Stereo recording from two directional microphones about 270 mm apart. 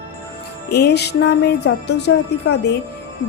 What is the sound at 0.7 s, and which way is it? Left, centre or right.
Speech, left.